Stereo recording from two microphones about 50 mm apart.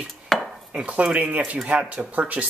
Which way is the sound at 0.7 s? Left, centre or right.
Right.